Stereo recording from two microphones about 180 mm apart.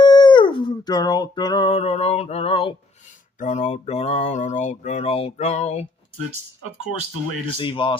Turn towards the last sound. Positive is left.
turn(degrees=30)  # may be behind; listen again after turning